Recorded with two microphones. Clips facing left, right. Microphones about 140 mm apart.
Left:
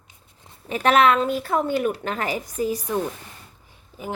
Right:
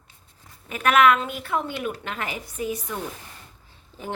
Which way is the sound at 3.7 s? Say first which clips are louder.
Left 2 dB; 10° left (ahead or behind).